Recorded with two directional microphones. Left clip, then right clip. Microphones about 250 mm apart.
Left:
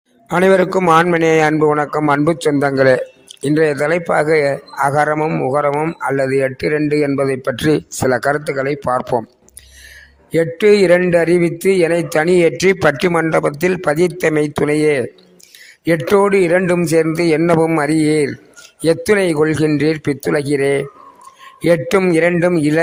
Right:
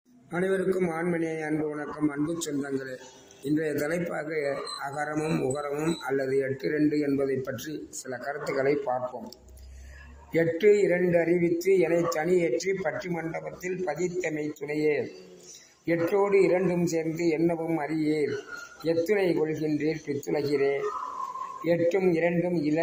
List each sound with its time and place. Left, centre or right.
0.3 s a man's voice: left
10.3 s a man's voice: left